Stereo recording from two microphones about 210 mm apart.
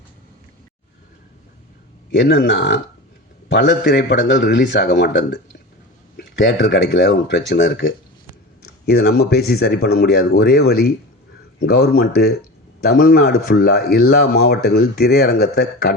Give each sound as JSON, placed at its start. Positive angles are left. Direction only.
{"t": 2.1, "sound": "speech", "side_deg": 60}